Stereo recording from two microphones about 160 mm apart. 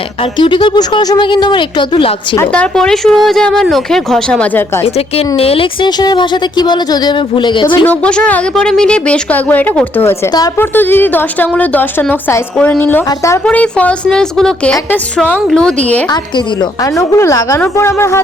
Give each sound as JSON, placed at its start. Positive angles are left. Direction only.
{"t": 0.3, "sound": "a woman's voice", "side_deg": 30}
{"t": 2.4, "sound": "speech", "side_deg": 5}
{"t": 4.9, "sound": "a woman's voice", "side_deg": 40}
{"t": 7.9, "sound": "speech", "side_deg": 10}
{"t": 16.6, "sound": "a woman's voice", "side_deg": 20}